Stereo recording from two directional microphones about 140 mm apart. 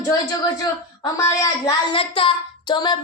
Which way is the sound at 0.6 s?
25° left (ahead or behind).